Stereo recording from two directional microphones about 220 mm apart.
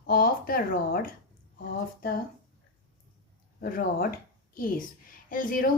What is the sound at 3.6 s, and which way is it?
A woman's voice, 40° left (ahead or behind).